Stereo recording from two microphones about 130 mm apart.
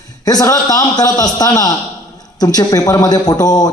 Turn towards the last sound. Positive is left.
turn(degrees=30)  # may be behind; listen again after turning